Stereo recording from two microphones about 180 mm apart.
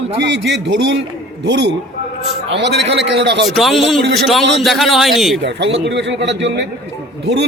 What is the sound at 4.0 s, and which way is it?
Speech, 75° right (ahead or behind).